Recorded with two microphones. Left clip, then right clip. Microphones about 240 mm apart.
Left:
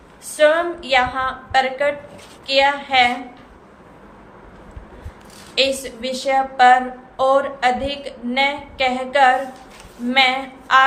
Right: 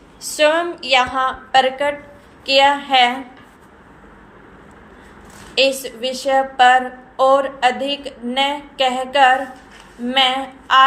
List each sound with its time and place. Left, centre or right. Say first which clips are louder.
0.2 s a woman's voice: even; centre
5.5 s a woman's voice: right 2 dB; centre